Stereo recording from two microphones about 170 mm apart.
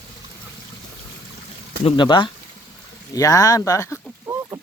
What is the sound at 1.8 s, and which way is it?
Speech, 30° left (ahead or behind).